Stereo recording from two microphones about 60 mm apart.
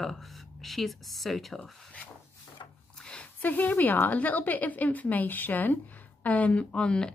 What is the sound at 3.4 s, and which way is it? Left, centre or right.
A woman's voice, left.